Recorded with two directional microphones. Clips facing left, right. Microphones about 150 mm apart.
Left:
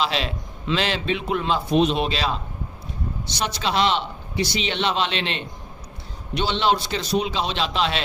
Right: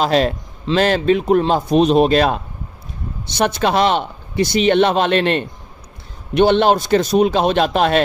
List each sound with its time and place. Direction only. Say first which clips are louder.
0.0 s a man's voice: right 9 dB; 45° right (ahead or behind)